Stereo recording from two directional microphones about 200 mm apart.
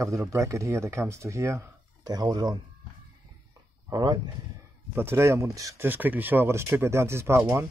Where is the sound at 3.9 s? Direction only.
20° right (ahead or behind).